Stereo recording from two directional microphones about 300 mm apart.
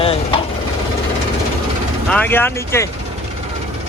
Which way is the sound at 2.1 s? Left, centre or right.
Centre.